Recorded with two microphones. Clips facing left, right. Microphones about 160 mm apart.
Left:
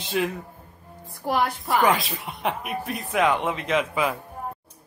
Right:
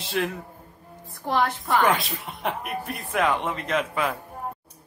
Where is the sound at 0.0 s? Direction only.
Centre (ahead or behind).